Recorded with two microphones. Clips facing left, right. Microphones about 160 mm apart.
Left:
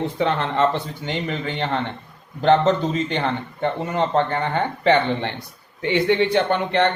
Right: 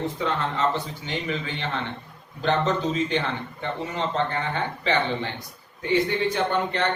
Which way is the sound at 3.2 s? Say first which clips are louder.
Left 5 dB; 55° left (ahead or behind).